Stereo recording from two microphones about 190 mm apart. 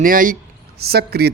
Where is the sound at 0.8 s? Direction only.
55° right (ahead or behind).